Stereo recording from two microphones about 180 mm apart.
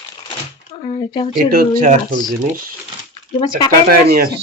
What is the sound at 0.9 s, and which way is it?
Speech, 25° left (ahead or behind).